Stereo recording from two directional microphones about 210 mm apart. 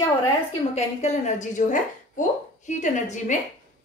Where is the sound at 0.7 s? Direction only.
35° left (ahead or behind).